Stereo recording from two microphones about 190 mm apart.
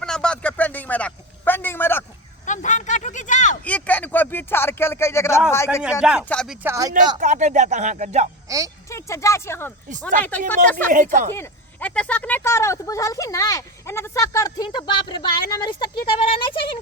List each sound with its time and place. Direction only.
0.0 s a sound: 5° left (ahead or behind)
2.5 s a sound: 40° left (ahead or behind)
3.6 s a sound: 10° left (ahead or behind)
5.5 s speech: 15° left (ahead or behind)
6.0 s speech: 5° right (ahead or behind)
6.6 s speech: 15° right (ahead or behind)
7.2 s speech: 40° right (ahead or behind)
8.4 s speech: 15° right (ahead or behind)
8.9 s speech: 15° left (ahead or behind)
10.9 s a woman's voice: 45° right (ahead or behind)
11.3 s speech: 10° left (ahead or behind); by 16.7 s 25° left (ahead or behind)